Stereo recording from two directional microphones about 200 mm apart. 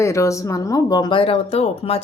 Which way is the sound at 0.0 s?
15° left (ahead or behind).